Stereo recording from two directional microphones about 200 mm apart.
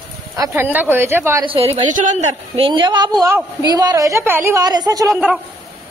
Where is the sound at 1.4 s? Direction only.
25° right (ahead or behind).